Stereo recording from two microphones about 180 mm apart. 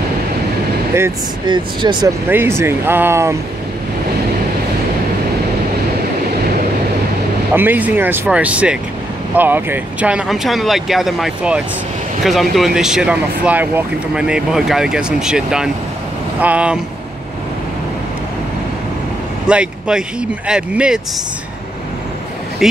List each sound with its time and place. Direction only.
1.5 s speech: 25° right (ahead or behind)
2.2 s speech: 10° right (ahead or behind)
7.5 s speech: 10° right (ahead or behind)
19.4 s speech: 5° right (ahead or behind)
22.6 s speech: centre (ahead or behind)